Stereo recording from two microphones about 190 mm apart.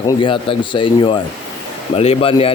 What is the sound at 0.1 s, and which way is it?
Speech, 25° left (ahead or behind).